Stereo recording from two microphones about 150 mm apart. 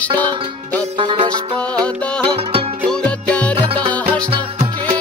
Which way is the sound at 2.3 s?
40° right (ahead or behind).